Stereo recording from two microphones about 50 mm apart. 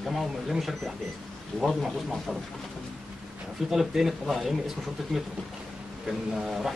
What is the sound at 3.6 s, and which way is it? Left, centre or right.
Speech, centre.